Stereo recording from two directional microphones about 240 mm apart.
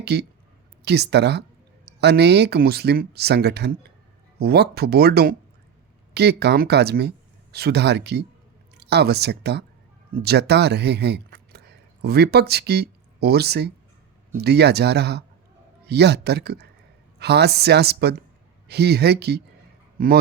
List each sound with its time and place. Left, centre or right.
0.0 s speech: right